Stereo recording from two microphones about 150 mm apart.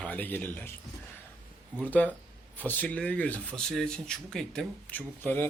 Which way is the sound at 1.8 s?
10° left (ahead or behind).